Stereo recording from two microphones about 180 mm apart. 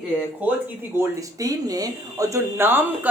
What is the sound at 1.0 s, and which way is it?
Speech, 20° right (ahead or behind).